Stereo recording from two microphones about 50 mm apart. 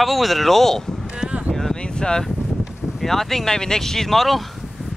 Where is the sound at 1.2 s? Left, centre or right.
Right.